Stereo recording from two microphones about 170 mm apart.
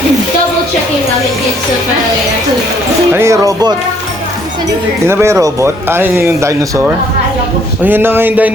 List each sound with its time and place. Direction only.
3.1 s speech: 15° right (ahead or behind)
5.0 s speech: 15° right (ahead or behind)